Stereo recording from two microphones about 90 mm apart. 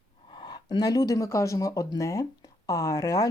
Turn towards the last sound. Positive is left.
turn(degrees=40)  # may be behind; listen again after turning